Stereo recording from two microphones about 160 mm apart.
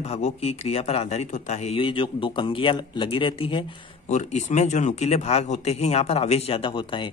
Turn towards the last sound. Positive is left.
turn(degrees=30)  # may be behind; listen again after turning